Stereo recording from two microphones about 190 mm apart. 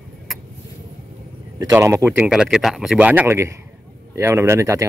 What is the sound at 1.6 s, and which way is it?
A man's voice, 15° right (ahead or behind).